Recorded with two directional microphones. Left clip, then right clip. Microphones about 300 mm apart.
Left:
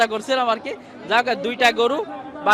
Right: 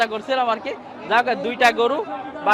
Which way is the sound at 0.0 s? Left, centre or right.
Left.